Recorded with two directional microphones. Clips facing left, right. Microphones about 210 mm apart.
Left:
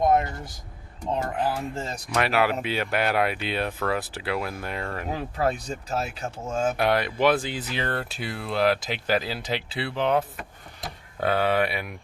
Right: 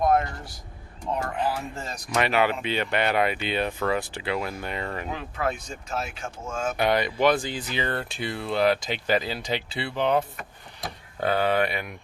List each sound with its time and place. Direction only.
0.0 s vehicle: 20° left (ahead or behind)
1.3 s speech: centre (ahead or behind)
1.7 s speech: 25° left (ahead or behind)
2.0 s speech: centre (ahead or behind)
5.1 s speech: 35° left (ahead or behind)
6.7 s speech: centre (ahead or behind)